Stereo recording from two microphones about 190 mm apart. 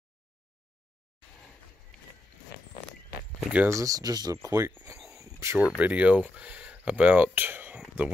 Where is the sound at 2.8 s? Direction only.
65° left (ahead or behind).